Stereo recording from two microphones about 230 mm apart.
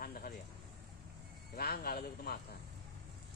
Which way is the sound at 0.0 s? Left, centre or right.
Left.